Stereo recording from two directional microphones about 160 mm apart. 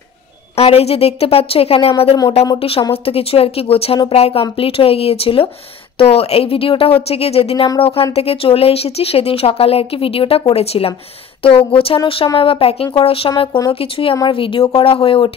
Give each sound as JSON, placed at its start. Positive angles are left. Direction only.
{"t": 0.6, "sound": "speech", "side_deg": 40}